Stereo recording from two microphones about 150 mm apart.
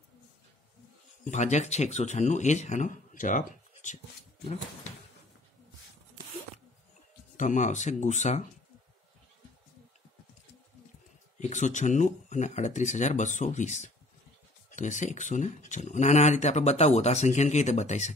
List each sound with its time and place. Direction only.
1.2 s speech: 50° left (ahead or behind)
7.3 s speech: 55° left (ahead or behind)
11.3 s speech: 55° left (ahead or behind)